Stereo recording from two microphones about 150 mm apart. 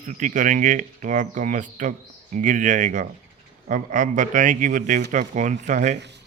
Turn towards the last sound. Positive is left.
turn(degrees=-50)  # may be behind; listen again after turning